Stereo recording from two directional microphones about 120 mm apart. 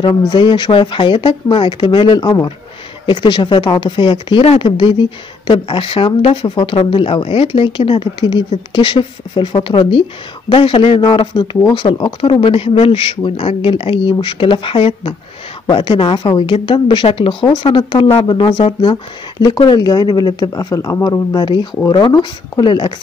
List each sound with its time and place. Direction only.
0.0 s speech: 40° left (ahead or behind)